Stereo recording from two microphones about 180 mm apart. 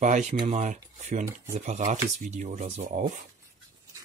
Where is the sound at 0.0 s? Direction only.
40° right (ahead or behind).